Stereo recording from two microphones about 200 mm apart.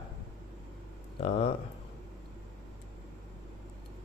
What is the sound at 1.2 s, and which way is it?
Speech, 30° left (ahead or behind).